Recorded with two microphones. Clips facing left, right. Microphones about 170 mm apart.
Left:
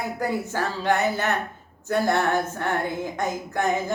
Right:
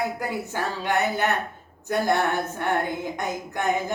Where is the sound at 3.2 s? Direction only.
15° right (ahead or behind).